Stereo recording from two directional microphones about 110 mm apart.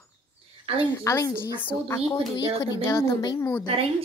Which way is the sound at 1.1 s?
30° left (ahead or behind).